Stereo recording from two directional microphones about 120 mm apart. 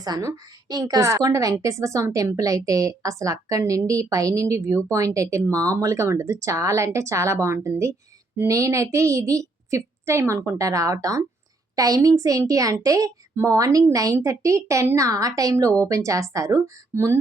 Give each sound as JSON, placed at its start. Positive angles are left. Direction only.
{"t": 0.0, "sound": "a woman's voice", "side_deg": -30}